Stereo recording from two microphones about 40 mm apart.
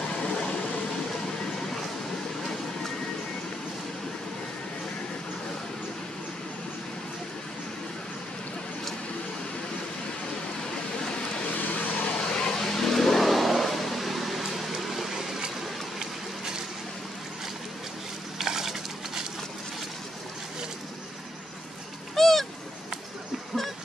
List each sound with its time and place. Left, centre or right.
11.5 s vehicle: left
12.2 s vehicle: centre
16.0 s a sound: centre
18.4 s stir: centre
22.1 s bird: centre